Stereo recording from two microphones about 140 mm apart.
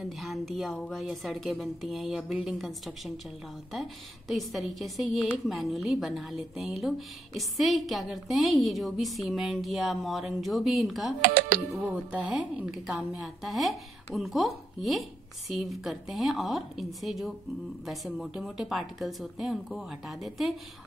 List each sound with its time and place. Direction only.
0.2 s a woman's voice: centre (ahead or behind)
3.7 s a woman's voice: centre (ahead or behind)
11.1 s speech: 70° right (ahead or behind)
11.7 s a woman's voice: 10° right (ahead or behind)